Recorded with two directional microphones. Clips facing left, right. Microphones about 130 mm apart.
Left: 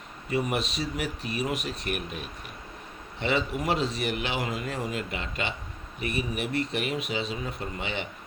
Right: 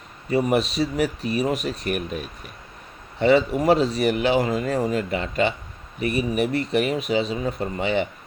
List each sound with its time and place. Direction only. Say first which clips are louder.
0.3 s speech: right 7 dB; 35° right (ahead or behind)